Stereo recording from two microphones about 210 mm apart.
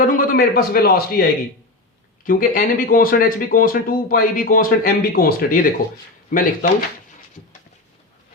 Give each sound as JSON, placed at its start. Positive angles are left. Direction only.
{"t": 0.0, "sound": "a man's voice", "side_deg": 40}